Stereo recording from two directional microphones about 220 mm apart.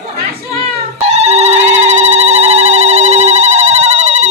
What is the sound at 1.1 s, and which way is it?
Telephone, 30° right (ahead or behind).